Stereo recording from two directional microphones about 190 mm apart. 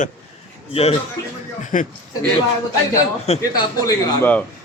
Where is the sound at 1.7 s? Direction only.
40° left (ahead or behind).